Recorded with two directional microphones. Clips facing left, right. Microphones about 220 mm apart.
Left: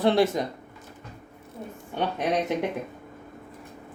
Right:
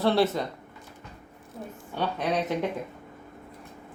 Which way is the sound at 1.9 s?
20° left (ahead or behind).